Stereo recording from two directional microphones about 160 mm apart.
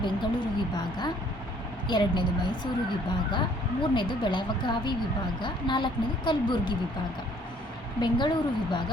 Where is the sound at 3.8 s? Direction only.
30° left (ahead or behind).